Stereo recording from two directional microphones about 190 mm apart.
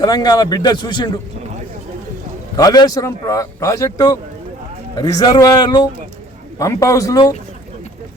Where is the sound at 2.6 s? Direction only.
20° left (ahead or behind).